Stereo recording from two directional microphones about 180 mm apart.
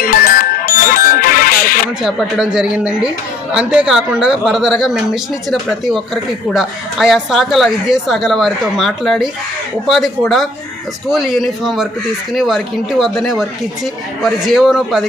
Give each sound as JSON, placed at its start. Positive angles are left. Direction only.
{"t": 0.0, "sound": "music", "side_deg": 55}
{"t": 2.0, "sound": "speech", "side_deg": 0}